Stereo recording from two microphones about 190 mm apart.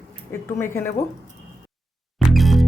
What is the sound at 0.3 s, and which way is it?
Speech, 10° left (ahead or behind).